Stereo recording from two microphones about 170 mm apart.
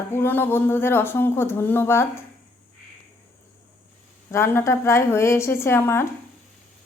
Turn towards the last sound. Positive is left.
turn(degrees=15)  # may be behind; listen again after turning